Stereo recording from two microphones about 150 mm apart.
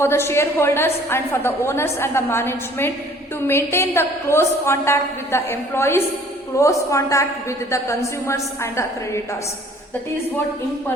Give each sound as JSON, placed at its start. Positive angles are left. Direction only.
{"t": 0.0, "sound": "a woman's voice", "side_deg": 15}